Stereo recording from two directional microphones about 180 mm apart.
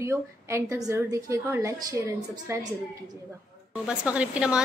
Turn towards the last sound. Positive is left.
turn(degrees=-5)  # may be behind; listen again after turning